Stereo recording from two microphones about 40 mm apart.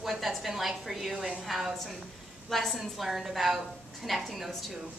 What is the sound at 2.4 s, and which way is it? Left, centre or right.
A woman's voice, centre.